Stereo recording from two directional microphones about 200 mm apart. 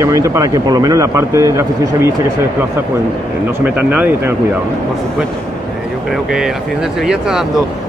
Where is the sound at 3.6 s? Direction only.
10° right (ahead or behind).